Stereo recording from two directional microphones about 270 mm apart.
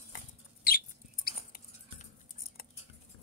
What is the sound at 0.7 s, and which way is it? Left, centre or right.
Bird, left.